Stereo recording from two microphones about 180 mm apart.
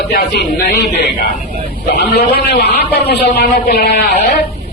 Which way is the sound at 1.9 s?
60° left (ahead or behind).